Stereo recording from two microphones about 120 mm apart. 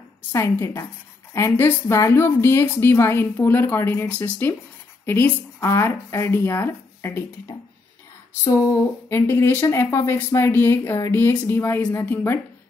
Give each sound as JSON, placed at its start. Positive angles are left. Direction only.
{"t": 0.3, "sound": "speech", "side_deg": 20}